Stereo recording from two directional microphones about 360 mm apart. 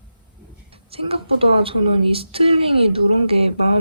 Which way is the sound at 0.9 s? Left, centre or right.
Centre.